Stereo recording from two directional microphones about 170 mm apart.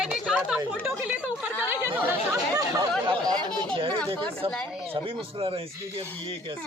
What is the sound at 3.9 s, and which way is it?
Speech, 10° left (ahead or behind).